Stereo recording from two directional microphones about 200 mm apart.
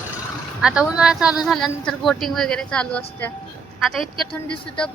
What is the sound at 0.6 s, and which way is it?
Speech, 5° right (ahead or behind).